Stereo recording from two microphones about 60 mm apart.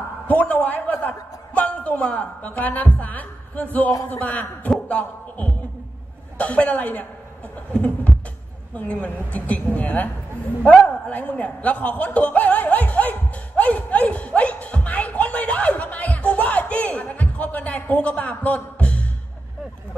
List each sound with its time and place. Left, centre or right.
0.3 s a sound: left
1.0 s a woman's voice: left
13.6 s music: left